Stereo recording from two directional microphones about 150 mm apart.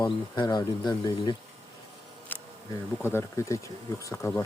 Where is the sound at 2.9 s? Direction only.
15° left (ahead or behind).